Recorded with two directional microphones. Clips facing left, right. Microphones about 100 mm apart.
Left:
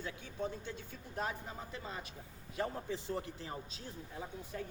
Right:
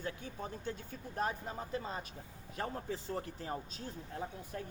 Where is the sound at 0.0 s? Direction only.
40° right (ahead or behind).